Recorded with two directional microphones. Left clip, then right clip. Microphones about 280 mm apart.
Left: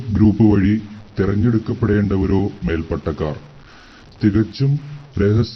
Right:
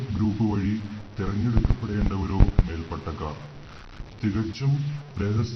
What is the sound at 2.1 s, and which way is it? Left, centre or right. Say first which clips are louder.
Speech: left 10 dB; left.